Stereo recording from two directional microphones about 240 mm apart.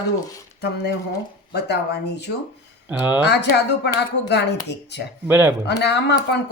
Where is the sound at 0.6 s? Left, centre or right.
Left.